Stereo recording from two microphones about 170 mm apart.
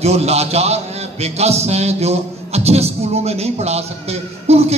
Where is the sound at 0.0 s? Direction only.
40° right (ahead or behind).